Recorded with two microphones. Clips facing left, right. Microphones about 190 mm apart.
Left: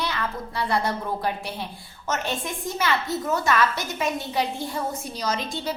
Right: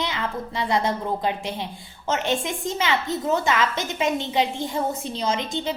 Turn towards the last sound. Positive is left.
turn(degrees=-20)  # may be behind; listen again after turning